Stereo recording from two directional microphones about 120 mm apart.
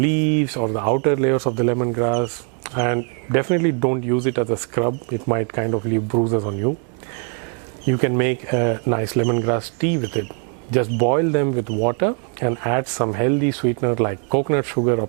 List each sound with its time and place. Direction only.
0.0 s speech: 10° right (ahead or behind)
7.9 s speech: 15° right (ahead or behind)